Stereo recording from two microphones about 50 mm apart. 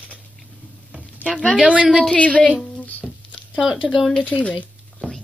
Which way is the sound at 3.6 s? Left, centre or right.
Centre.